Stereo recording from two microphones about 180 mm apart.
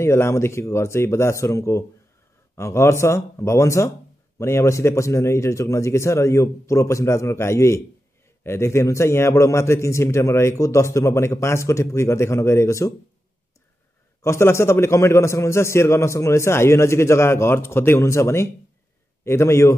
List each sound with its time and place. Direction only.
0.0 s a man's voice: 15° left (ahead or behind)
14.2 s a man's voice: 15° left (ahead or behind)